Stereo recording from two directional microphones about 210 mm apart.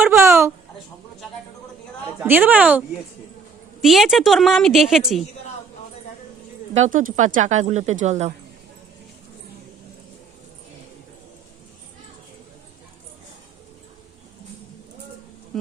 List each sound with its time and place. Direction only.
0.0 s a sound: 10° right (ahead or behind)
2.1 s a woman's voice: 10° right (ahead or behind)
6.7 s speech: 35° right (ahead or behind)